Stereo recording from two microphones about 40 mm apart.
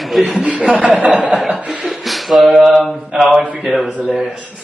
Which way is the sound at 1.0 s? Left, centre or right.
Right.